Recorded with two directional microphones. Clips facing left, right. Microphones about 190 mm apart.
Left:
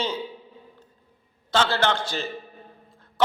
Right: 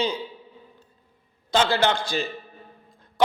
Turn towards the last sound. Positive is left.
turn(degrees=-15)  # may be behind; listen again after turning